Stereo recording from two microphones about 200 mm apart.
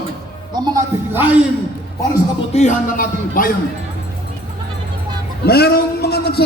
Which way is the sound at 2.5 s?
35° left (ahead or behind).